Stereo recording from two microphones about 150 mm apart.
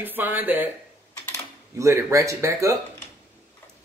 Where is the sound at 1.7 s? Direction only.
20° right (ahead or behind).